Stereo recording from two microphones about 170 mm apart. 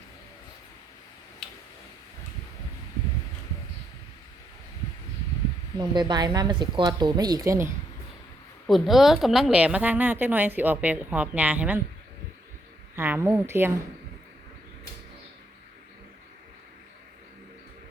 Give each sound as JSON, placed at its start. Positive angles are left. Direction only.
{"t": 5.7, "sound": "a woman's voice", "side_deg": -25}
{"t": 8.6, "sound": "a woman's voice", "side_deg": 0}
{"t": 13.0, "sound": "a woman's voice", "side_deg": -15}